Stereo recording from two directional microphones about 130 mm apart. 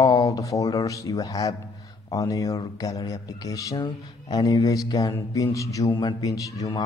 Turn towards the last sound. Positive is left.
turn(degrees=30)  # may be behind; listen again after turning